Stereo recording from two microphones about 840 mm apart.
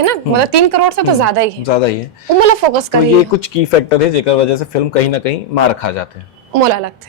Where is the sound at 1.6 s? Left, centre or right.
Left.